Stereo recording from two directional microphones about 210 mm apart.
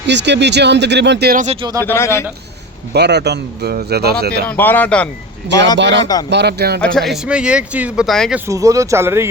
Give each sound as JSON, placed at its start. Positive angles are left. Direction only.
{"t": 0.1, "sound": "speech", "side_deg": -55}
{"t": 1.8, "sound": "a man's voice", "side_deg": 10}
{"t": 2.9, "sound": "a man's voice", "side_deg": -55}
{"t": 4.4, "sound": "a man's voice", "side_deg": 10}
{"t": 5.7, "sound": "a man's voice", "side_deg": -55}
{"t": 6.8, "sound": "speech", "side_deg": 0}
{"t": 8.4, "sound": "speech", "side_deg": -15}